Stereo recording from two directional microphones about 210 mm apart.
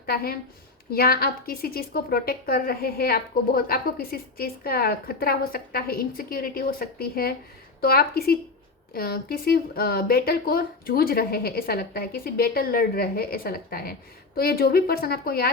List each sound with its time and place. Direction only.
0.0 s a woman's voice: 45° left (ahead or behind)